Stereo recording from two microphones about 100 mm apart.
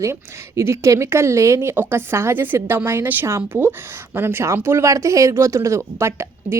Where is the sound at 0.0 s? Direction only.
25° right (ahead or behind).